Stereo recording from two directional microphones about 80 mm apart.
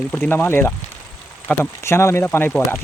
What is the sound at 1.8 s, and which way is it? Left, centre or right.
Speech, left.